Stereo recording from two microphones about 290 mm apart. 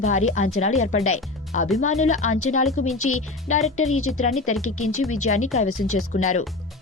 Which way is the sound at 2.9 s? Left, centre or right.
Left.